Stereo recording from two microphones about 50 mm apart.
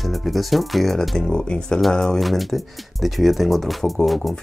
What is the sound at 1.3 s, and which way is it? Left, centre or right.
Speech, centre.